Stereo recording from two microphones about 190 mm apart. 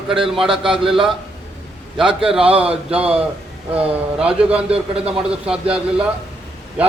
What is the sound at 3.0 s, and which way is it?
Speech, 5° right (ahead or behind).